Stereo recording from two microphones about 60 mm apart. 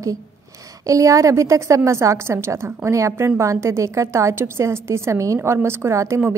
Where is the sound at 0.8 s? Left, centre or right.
Right.